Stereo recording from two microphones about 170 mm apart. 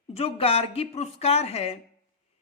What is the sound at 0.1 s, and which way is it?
Speech, 35° left (ahead or behind).